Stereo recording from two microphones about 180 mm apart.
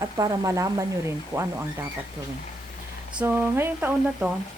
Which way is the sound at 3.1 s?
10° right (ahead or behind).